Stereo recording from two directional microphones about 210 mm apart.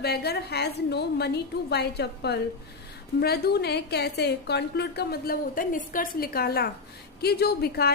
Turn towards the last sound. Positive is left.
turn(degrees=50)  # may be behind; listen again after turning